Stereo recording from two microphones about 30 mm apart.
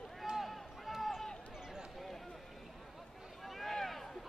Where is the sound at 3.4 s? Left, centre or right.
Centre.